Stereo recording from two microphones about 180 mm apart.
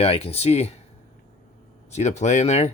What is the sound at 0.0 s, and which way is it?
Speech, 35° left (ahead or behind).